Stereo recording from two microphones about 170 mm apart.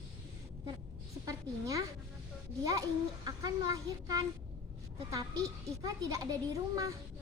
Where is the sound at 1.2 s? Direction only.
20° right (ahead or behind).